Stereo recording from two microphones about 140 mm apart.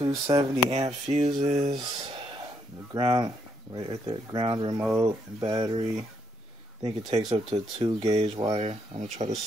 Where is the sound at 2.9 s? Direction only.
30° right (ahead or behind).